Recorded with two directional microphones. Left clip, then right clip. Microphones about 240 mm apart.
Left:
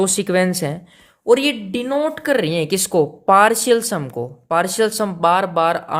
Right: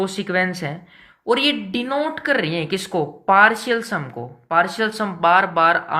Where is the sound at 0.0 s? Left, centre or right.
Left.